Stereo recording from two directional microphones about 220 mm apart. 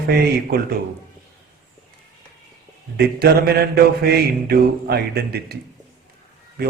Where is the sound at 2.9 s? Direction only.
45° right (ahead or behind).